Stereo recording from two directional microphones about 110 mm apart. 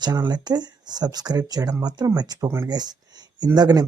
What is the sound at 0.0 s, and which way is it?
Speech, 40° right (ahead or behind).